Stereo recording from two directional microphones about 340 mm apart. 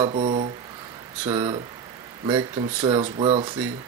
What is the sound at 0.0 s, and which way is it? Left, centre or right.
Speech, centre.